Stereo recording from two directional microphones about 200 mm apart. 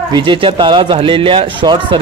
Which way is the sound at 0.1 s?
25° right (ahead or behind).